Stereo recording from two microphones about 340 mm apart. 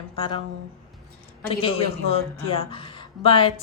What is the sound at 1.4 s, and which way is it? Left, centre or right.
A woman's voice, centre.